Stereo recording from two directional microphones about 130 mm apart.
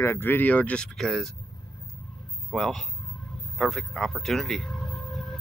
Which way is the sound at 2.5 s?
5° left (ahead or behind).